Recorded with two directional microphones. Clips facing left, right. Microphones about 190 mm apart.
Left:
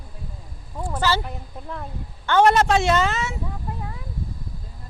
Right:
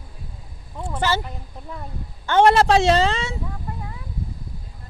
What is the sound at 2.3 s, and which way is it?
Speech, 30° right (ahead or behind).